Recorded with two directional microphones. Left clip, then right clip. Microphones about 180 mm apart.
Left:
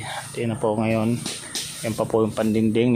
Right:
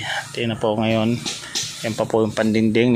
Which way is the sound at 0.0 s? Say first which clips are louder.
Right 4 dB; 5° right (ahead or behind).